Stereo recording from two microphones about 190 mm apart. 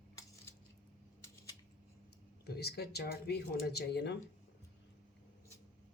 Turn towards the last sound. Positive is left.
turn(degrees=60)  # may be behind; listen again after turning